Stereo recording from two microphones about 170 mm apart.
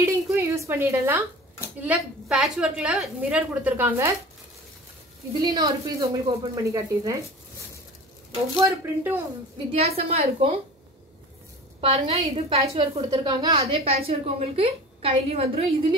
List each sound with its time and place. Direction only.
0.0 s a woman's voice: 15° right (ahead or behind)
5.4 s speech: 20° right (ahead or behind)
8.5 s a woman's voice: 15° right (ahead or behind)
9.7 s a woman's voice: 35° right (ahead or behind)
11.8 s a woman's voice: 35° right (ahead or behind)
13.1 s a woman's voice: 25° right (ahead or behind)